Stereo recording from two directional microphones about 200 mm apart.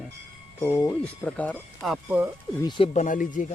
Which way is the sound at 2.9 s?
40° left (ahead or behind).